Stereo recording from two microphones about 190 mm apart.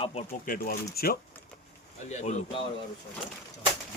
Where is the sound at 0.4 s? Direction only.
50° left (ahead or behind).